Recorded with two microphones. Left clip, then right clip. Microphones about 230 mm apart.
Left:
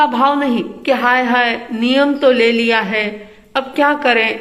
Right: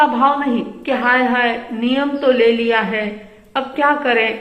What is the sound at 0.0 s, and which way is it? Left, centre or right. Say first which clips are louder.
A woman's voice: left 1 dB; left.